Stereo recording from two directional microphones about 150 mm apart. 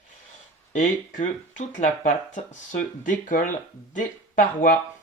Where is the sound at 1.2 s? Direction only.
50° left (ahead or behind).